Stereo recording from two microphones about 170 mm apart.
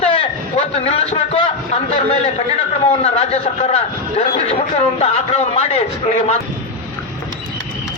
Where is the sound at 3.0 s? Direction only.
40° left (ahead or behind).